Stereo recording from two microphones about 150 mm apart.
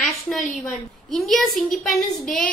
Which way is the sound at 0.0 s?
Centre (ahead or behind).